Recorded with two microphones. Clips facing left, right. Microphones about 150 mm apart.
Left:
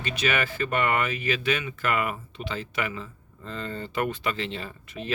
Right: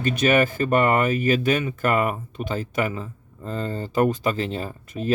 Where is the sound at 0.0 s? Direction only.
45° right (ahead or behind).